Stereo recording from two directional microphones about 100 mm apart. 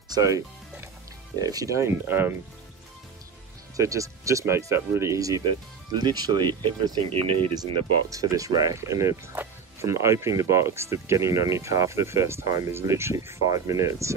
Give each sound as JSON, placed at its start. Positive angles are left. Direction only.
{"t": 0.1, "sound": "speech", "side_deg": -35}
{"t": 1.4, "sound": "speech", "side_deg": -40}
{"t": 3.7, "sound": "speech", "side_deg": -35}
{"t": 5.4, "sound": "speech", "side_deg": -50}
{"t": 8.1, "sound": "speech", "side_deg": -35}